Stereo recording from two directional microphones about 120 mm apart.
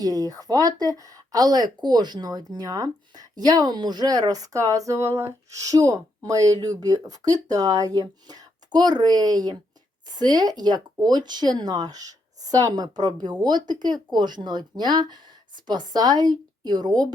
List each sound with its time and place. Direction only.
0.0 s speech: 30° right (ahead or behind)